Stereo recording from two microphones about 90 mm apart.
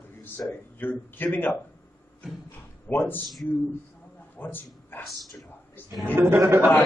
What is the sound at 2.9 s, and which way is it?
Speech, 20° left (ahead or behind).